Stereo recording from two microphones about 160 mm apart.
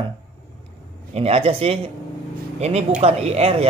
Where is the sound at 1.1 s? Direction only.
40° right (ahead or behind).